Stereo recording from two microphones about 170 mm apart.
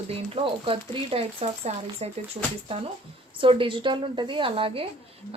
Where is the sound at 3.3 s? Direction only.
30° right (ahead or behind).